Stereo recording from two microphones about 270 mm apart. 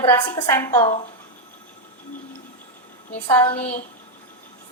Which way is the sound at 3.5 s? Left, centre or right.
Left.